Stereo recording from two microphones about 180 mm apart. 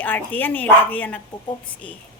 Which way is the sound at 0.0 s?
10° left (ahead or behind).